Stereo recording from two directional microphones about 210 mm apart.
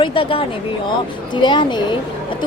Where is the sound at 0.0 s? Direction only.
25° left (ahead or behind).